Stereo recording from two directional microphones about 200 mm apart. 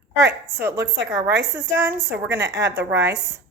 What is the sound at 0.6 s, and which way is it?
A woman's voice, 15° right (ahead or behind).